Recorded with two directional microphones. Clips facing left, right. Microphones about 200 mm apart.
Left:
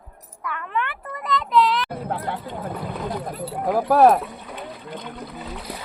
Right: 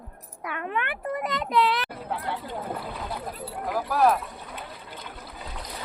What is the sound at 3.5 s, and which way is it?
Speech, 55° left (ahead or behind).